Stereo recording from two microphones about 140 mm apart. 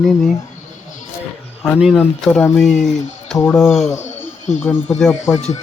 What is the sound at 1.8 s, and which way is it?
Speech, centre (ahead or behind).